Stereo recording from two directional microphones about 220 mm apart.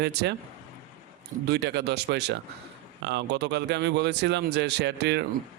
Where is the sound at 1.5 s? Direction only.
50° right (ahead or behind).